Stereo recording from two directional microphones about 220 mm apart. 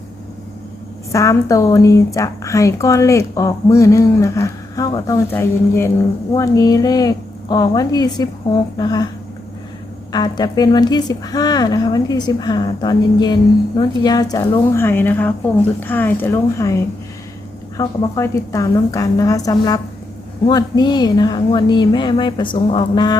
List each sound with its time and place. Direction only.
1.1 s a woman's voice: 15° left (ahead or behind)
10.1 s a woman's voice: 20° left (ahead or behind)